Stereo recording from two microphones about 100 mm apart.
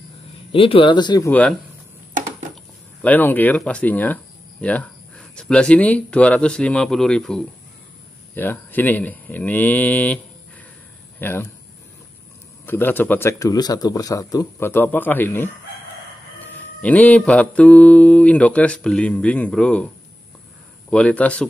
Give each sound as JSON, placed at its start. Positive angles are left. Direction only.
{"t": 0.5, "sound": "speech", "side_deg": 65}
{"t": 3.0, "sound": "speech", "side_deg": 15}
{"t": 8.4, "sound": "mantra", "side_deg": 20}
{"t": 11.1, "sound": "speech", "side_deg": 20}
{"t": 12.6, "sound": "speech", "side_deg": 20}
{"t": 13.3, "sound": "speech", "side_deg": 35}
{"t": 14.7, "sound": "speech", "side_deg": 20}
{"t": 16.3, "sound": "mantra", "side_deg": 15}
{"t": 20.9, "sound": "mantra", "side_deg": 10}